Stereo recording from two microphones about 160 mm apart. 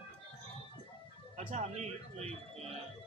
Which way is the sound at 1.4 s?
50° right (ahead or behind).